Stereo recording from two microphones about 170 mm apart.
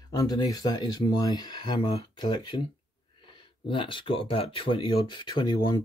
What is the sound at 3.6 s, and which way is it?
Speech, 30° left (ahead or behind).